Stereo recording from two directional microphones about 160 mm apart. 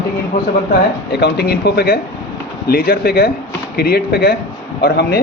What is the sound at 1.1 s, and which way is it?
A man's voice, 90° left.